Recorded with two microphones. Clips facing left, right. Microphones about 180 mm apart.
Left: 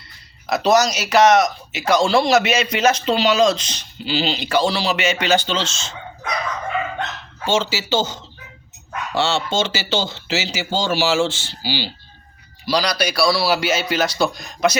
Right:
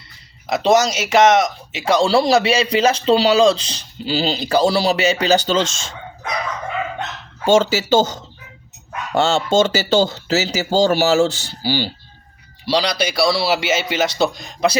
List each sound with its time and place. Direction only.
0.4 s speech: 25° right (ahead or behind); by 5.8 s 50° right (ahead or behind)
7.4 s speech: 50° right (ahead or behind)
12.6 s a man's voice: 25° right (ahead or behind)